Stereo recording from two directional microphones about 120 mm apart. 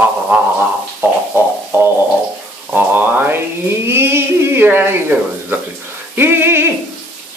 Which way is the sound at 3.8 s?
20° right (ahead or behind).